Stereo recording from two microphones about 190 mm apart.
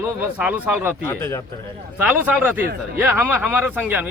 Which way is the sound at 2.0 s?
10° right (ahead or behind).